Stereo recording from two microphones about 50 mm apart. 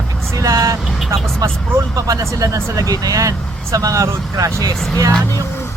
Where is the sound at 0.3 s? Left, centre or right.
Right.